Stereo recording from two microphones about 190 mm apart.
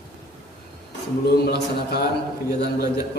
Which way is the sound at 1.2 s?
55° left (ahead or behind).